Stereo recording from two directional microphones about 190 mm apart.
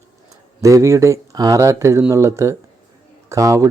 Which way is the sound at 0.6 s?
15° right (ahead or behind).